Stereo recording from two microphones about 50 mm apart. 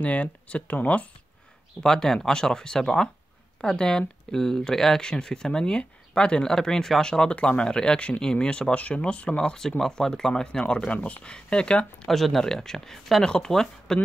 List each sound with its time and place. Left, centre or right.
0.0 s speech: left
1.8 s speech: centre; by 11.2 s left
11.2 s speech: centre
12.1 s speech: centre